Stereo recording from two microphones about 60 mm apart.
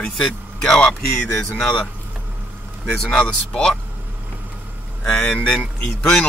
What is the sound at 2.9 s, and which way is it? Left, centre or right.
Speech, centre.